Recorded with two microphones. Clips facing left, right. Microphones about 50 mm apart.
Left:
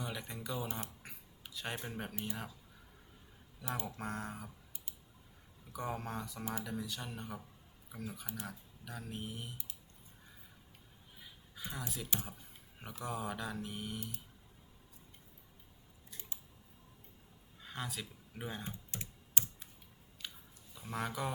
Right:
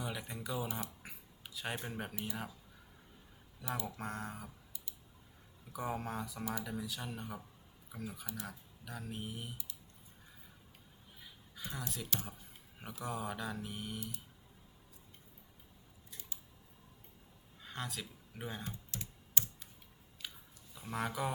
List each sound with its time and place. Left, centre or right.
0.0 s speech: centre
1.0 s a sound: centre
2.2 s speech: centre
3.8 s speech: centre
5.7 s speech: centre
11.2 s a sound: centre
13.0 s speech: centre
17.6 s speech: centre
18.6 s typing: centre
20.2 s chewing: centre
20.7 s speech: centre